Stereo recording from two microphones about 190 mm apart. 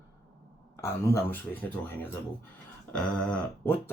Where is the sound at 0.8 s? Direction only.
15° left (ahead or behind).